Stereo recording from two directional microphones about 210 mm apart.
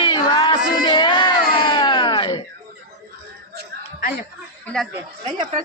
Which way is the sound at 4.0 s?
40° left (ahead or behind).